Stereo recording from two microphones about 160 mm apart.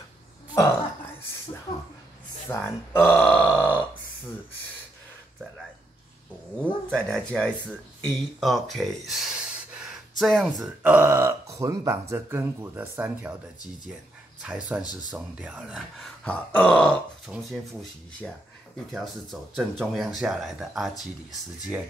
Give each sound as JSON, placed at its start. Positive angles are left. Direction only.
{"t": 0.6, "sound": "a sound", "side_deg": 15}
{"t": 2.4, "sound": "speech", "side_deg": 10}
{"t": 6.6, "sound": "speech", "side_deg": 5}
{"t": 9.8, "sound": "a sound", "side_deg": 0}
{"t": 10.8, "sound": "speech", "side_deg": -10}
{"t": 14.4, "sound": "speech", "side_deg": -10}
{"t": 14.8, "sound": "speech", "side_deg": 25}
{"t": 15.0, "sound": "speech", "side_deg": -5}
{"t": 16.3, "sound": "grunt", "side_deg": 10}
{"t": 17.3, "sound": "speech", "side_deg": 0}
{"t": 18.9, "sound": "speech", "side_deg": 0}